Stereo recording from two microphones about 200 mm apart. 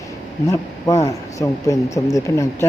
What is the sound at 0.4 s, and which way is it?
Speech, 15° left (ahead or behind).